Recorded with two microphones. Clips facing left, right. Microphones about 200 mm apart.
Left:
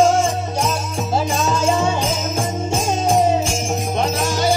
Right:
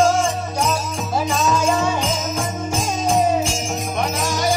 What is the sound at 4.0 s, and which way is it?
Music, 25° left (ahead or behind).